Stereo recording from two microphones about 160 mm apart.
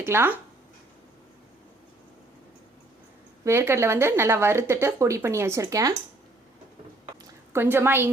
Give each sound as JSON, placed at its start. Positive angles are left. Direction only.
{"t": 0.0, "sound": "speech", "side_deg": -15}
{"t": 3.4, "sound": "speech", "side_deg": -15}
{"t": 7.5, "sound": "speech", "side_deg": -15}